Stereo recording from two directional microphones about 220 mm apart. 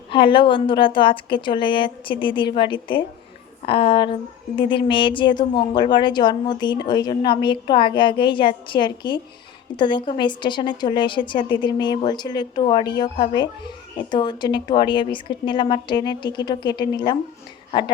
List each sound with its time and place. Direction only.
0.1 s a woman's voice: 20° left (ahead or behind)